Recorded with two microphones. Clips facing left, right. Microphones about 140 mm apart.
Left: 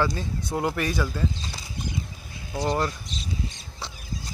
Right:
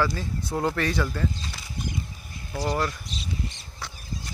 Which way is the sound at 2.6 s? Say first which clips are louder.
Left 1 dB; 25° left (ahead or behind).